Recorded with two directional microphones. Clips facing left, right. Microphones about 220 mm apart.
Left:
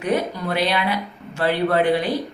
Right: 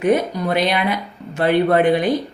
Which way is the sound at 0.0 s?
20° right (ahead or behind).